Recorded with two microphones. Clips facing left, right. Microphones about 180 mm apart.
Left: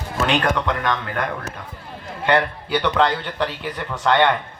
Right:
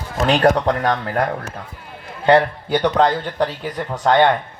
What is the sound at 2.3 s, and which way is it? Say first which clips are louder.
A man's voice: right 5 dB; 40° right (ahead or behind).